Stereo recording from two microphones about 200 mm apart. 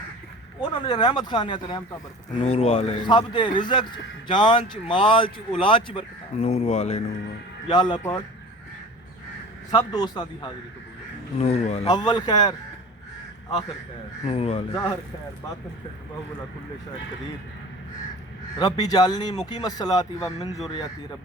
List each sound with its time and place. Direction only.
0.6 s speech: 25° left (ahead or behind)
7.7 s speech: 20° left (ahead or behind)
9.7 s speech: 20° left (ahead or behind)
11.3 s speech: 30° left (ahead or behind)
14.3 s speech: 30° left (ahead or behind)
18.6 s speech: 20° left (ahead or behind)